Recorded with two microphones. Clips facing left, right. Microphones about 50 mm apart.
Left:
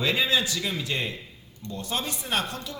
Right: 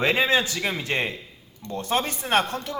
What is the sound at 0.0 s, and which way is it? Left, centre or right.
A man's voice, right.